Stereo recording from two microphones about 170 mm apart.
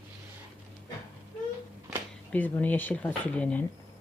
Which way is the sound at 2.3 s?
10° left (ahead or behind).